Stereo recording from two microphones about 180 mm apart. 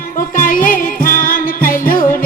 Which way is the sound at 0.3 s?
50° left (ahead or behind).